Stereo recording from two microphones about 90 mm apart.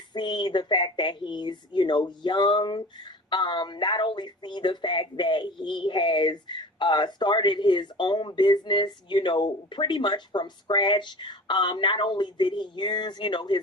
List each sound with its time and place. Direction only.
0.1 s speech: 55° left (ahead or behind)